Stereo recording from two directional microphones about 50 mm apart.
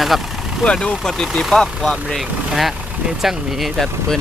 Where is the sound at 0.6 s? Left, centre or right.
Left; by 3.7 s centre.